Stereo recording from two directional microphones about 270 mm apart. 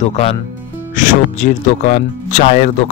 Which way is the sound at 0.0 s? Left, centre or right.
Left.